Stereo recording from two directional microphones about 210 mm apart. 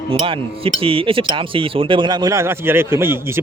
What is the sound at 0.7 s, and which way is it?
Speech, 25° right (ahead or behind).